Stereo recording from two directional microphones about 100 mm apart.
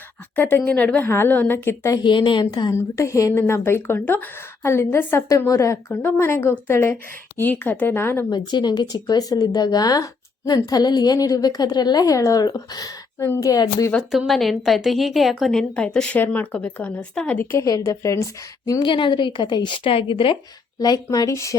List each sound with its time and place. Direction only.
0.3 s speech: 20° left (ahead or behind)
2.0 s a woman's voice: 50° left (ahead or behind)
2.7 s speech: 30° left (ahead or behind)
8.3 s speech: 45° left (ahead or behind)
14.1 s a woman's voice: centre (ahead or behind)
15.7 s speech: 10° left (ahead or behind)
17.5 s speech: 30° left (ahead or behind)
18.8 s a woman's voice: 55° left (ahead or behind)
20.7 s speech: 40° left (ahead or behind)